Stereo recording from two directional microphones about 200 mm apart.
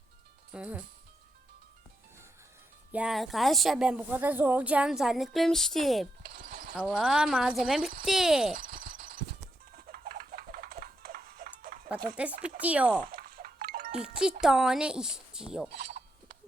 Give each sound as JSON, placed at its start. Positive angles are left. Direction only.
{"t": 0.5, "sound": "speech", "side_deg": -5}
{"t": 2.9, "sound": "speech", "side_deg": -5}
{"t": 6.5, "sound": "horse", "side_deg": -50}
{"t": 6.7, "sound": "speech", "side_deg": -5}
{"t": 8.5, "sound": "a sound", "side_deg": -45}
{"t": 12.1, "sound": "speech", "side_deg": -5}
{"t": 13.1, "sound": "a sound", "side_deg": -45}
{"t": 14.0, "sound": "speech", "side_deg": -5}
{"t": 15.9, "sound": "chink", "side_deg": -40}